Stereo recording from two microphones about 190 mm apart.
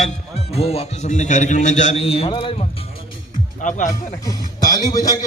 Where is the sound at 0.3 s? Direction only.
35° left (ahead or behind).